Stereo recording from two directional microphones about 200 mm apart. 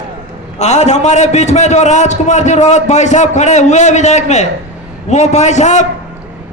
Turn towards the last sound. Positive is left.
turn(degrees=35)  # may be behind; listen again after turning